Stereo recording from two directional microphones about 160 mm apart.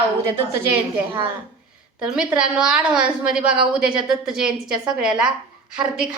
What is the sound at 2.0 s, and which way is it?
A woman's voice, 5° right (ahead or behind).